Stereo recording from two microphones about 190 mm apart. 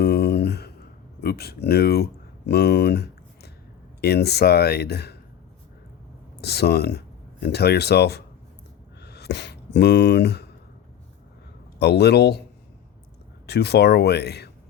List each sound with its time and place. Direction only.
0.0 s a sound: 60° left (ahead or behind)
1.2 s speech: 55° left (ahead or behind)
6.4 s speech: 55° left (ahead or behind)
11.8 s speech: 60° left (ahead or behind)
13.5 s speech: 60° left (ahead or behind)